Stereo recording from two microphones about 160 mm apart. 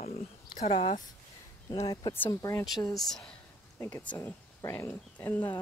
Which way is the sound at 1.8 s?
20° left (ahead or behind).